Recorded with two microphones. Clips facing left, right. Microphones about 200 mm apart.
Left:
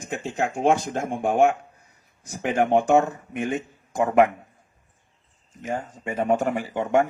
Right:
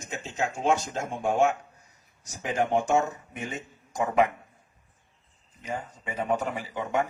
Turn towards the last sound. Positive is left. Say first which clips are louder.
# left 7 dB
turn(degrees=50)  # may be behind; listen again after turning